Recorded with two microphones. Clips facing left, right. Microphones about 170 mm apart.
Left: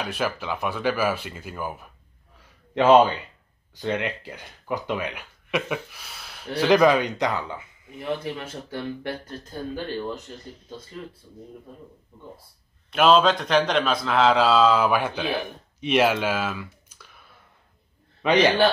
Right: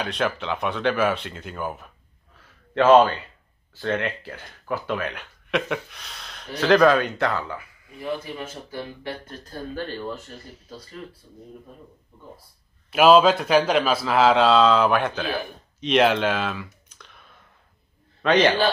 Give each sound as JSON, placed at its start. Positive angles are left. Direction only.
{"t": 0.0, "sound": "speech", "side_deg": 5}
{"t": 2.3, "sound": "a sound", "side_deg": 15}
{"t": 3.7, "sound": "speech", "side_deg": 15}
{"t": 9.4, "sound": "speech", "side_deg": 20}
{"t": 12.9, "sound": "a man's voice", "side_deg": -5}
{"t": 18.2, "sound": "a man's voice", "side_deg": 10}